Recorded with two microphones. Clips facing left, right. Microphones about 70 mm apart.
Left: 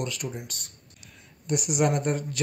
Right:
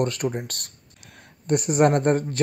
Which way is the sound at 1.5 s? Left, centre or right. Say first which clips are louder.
Right 6 dB; right.